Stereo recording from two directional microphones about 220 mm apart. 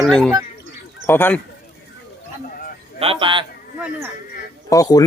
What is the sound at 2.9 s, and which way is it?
Speech, 25° right (ahead or behind).